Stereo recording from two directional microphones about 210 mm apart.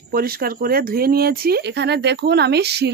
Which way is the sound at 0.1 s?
45° right (ahead or behind).